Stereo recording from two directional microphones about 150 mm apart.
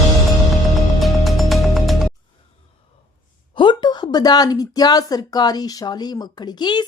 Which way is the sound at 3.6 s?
30° left (ahead or behind).